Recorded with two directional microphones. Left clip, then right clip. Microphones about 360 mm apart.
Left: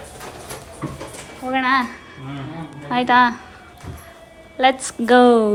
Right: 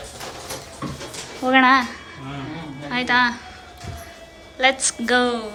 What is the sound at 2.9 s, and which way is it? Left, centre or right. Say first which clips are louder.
Speech: left 4 dB; centre.